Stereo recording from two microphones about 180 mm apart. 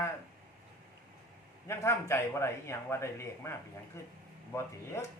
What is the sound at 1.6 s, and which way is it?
A man's voice, 15° left (ahead or behind).